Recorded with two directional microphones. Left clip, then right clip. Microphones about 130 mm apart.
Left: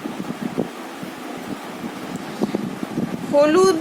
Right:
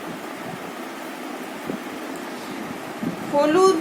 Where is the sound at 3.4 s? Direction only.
65° left (ahead or behind).